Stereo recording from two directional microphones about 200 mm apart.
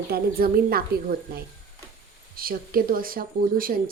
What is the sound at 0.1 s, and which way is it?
Speech, 50° right (ahead or behind).